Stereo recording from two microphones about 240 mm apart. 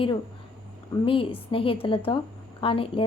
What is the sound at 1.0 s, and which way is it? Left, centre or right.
A woman's voice, left.